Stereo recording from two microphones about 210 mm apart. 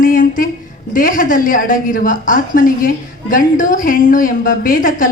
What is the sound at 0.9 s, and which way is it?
A woman's voice, 40° left (ahead or behind).